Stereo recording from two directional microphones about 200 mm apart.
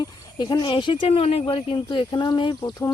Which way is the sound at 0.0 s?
20° left (ahead or behind).